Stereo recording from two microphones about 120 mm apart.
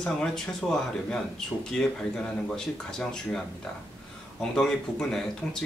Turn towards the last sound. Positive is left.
turn(degrees=5)  # may be behind; listen again after turning